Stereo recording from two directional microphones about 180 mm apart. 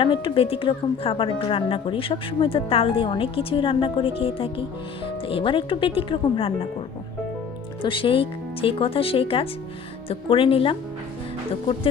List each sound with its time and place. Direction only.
0.0 s speech: 30° left (ahead or behind)
7.8 s speech: 30° left (ahead or behind)